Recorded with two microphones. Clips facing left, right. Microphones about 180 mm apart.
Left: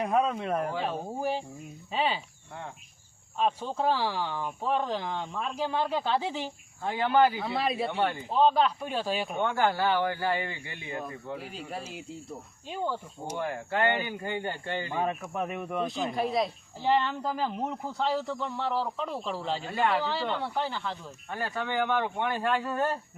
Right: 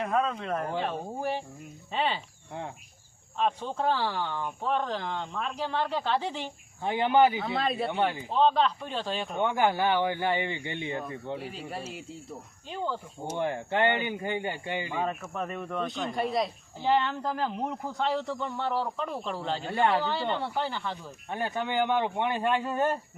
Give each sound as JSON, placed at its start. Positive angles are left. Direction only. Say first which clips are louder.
{"t": 0.0, "sound": "speech", "louder": "left 2 dB", "side_deg": 15}
{"t": 3.3, "sound": "speech", "louder": "even", "side_deg": 5}
{"t": 6.8, "sound": "speech", "louder": "right 1 dB", "side_deg": -20}
{"t": 7.3, "sound": "speech", "louder": "even", "side_deg": 5}
{"t": 7.9, "sound": "speech", "louder": "right 1 dB", "side_deg": -15}
{"t": 8.3, "sound": "speech", "louder": "left 1 dB", "side_deg": 5}
{"t": 9.4, "sound": "speech", "louder": "right 2 dB", "side_deg": -15}
{"t": 11.3, "sound": "speech", "louder": "right 1 dB", "side_deg": 0}
{"t": 13.3, "sound": "speech", "louder": "right 2 dB", "side_deg": -25}
{"t": 15.2, "sound": "speech", "louder": "left 1 dB", "side_deg": 10}
{"t": 21.2, "sound": "speech", "louder": "right 2 dB", "side_deg": -20}